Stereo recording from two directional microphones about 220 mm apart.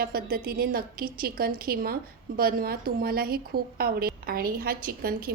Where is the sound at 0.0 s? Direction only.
45° right (ahead or behind).